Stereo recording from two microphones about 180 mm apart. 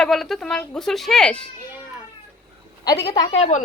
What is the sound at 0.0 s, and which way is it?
A woman's voice, centre (ahead or behind).